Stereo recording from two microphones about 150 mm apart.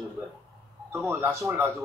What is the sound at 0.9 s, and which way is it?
Speech, 15° right (ahead or behind).